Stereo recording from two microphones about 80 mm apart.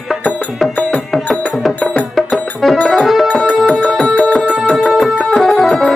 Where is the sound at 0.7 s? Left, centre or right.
Centre.